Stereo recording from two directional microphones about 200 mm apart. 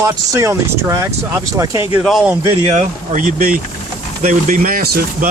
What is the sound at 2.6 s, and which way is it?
Speech, 35° right (ahead or behind).